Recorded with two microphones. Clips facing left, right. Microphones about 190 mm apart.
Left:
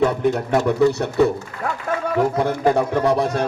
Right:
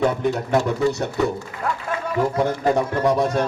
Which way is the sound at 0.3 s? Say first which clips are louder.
Left 3 dB; 60° left (ahead or behind).